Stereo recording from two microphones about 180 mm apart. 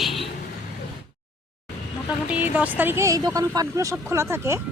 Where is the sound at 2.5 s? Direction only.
10° right (ahead or behind).